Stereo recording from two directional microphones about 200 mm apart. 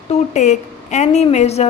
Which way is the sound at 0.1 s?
35° left (ahead or behind).